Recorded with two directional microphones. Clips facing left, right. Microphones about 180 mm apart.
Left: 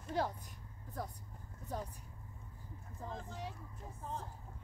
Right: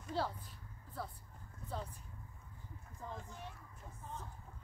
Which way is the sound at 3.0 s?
35° left (ahead or behind).